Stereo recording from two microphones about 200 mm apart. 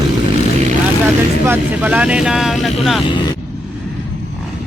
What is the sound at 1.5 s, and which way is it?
Speech, 5° right (ahead or behind).